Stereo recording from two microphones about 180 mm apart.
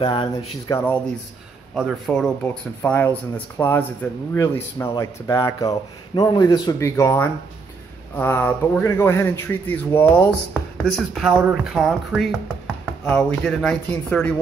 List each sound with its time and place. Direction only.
0.0 s speech: 25° left (ahead or behind)
0.7 s speech: 10° left (ahead or behind)